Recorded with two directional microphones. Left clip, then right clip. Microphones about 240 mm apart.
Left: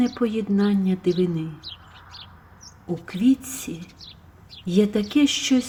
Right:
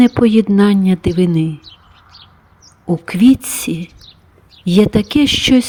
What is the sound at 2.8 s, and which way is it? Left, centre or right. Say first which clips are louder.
Speech: right 10 dB; right.